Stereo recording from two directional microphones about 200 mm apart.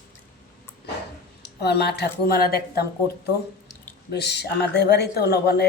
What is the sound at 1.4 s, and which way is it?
Speech, 55° left (ahead or behind).